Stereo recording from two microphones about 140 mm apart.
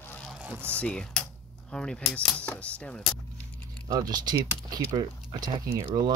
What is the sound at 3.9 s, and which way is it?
Speech, 30° right (ahead or behind).